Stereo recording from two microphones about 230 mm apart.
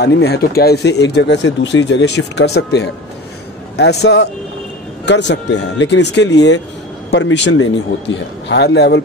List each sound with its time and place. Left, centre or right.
0.0 s speech: left